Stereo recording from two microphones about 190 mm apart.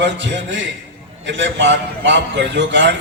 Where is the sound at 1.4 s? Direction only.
70° right (ahead or behind).